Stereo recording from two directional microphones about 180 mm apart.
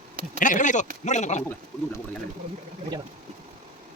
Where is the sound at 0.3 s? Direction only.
45° left (ahead or behind).